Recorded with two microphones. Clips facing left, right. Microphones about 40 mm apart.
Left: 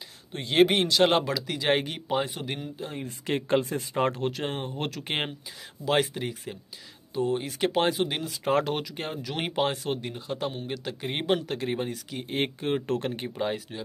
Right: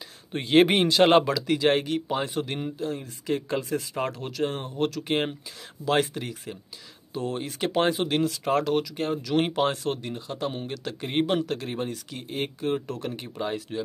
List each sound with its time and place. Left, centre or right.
0.3 s a man's voice: centre
1.7 s speech: centre
3.0 s speech: left
3.6 s speech: left
5.9 s speech: centre
8.5 s speech: left; by 12.3 s centre
12.3 s speech: left
12.8 s speech: left
13.4 s speech: centre